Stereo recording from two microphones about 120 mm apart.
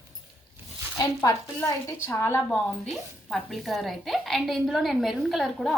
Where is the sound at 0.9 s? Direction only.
30° left (ahead or behind).